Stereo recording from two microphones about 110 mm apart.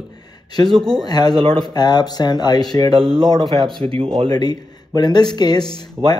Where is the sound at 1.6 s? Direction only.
40° left (ahead or behind).